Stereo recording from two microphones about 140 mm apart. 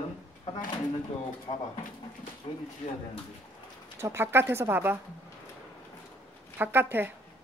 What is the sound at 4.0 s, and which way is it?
Speech, 15° right (ahead or behind).